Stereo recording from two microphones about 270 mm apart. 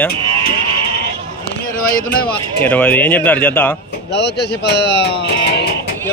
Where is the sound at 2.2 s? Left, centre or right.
Centre.